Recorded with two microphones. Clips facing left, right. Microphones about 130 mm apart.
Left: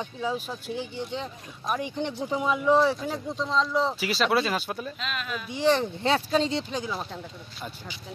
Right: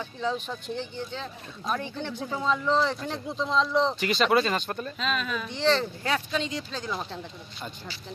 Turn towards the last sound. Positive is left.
turn(degrees=5)  # may be behind; listen again after turning